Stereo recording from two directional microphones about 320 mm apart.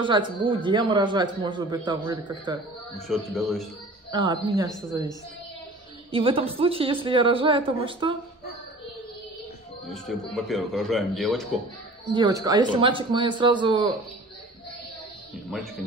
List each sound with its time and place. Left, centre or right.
0.0 s a woman's voice: centre
3.1 s a man's voice: centre
4.1 s a woman's voice: centre
6.1 s a woman's voice: centre
9.8 s a man's voice: centre
12.1 s a woman's voice: centre
15.4 s speech: centre